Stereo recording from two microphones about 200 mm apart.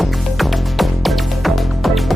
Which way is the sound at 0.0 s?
Centre (ahead or behind).